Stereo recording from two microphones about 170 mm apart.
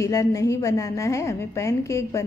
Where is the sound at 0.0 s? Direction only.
20° left (ahead or behind).